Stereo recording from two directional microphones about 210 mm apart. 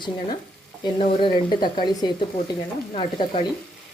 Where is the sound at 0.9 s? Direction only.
25° left (ahead or behind).